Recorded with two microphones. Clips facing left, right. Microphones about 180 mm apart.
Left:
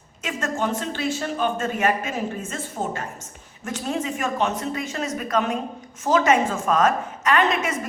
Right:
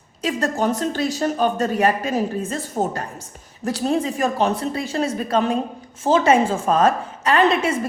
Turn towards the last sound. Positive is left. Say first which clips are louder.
# right 5 dB
turn(degrees=-30)  # may be behind; listen again after turning